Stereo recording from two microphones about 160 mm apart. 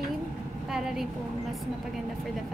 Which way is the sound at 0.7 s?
5° right (ahead or behind).